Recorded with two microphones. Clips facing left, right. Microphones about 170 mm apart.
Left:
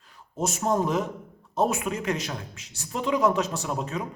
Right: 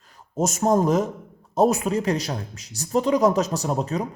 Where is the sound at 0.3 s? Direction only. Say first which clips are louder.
Right 5 dB; 45° right (ahead or behind).